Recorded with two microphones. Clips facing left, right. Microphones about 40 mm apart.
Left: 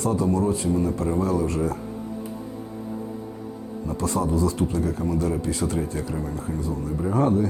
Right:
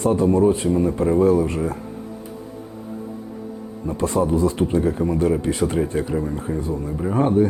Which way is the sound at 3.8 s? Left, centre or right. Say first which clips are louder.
Right 5 dB; right.